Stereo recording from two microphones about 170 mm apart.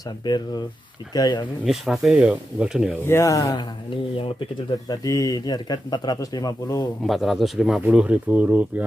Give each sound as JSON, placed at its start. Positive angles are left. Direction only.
{"t": 0.2, "sound": "speech", "side_deg": 25}
{"t": 1.7, "sound": "speech", "side_deg": 0}
{"t": 3.1, "sound": "speech", "side_deg": 15}
{"t": 7.1, "sound": "speech", "side_deg": 0}